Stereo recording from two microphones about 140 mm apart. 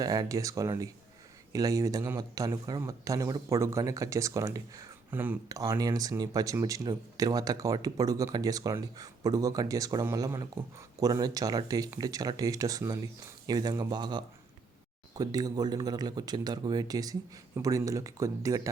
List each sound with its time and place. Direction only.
0.0 s speech: 25° right (ahead or behind)
5.5 s speech: 25° right (ahead or behind)